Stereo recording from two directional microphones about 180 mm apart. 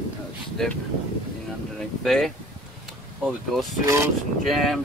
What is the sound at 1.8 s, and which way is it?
Speech, centre (ahead or behind).